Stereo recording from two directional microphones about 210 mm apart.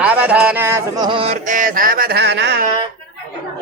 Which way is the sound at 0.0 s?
5° right (ahead or behind).